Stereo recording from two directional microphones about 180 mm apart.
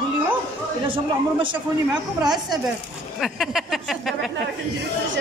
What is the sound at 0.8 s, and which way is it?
Speech, 30° right (ahead or behind).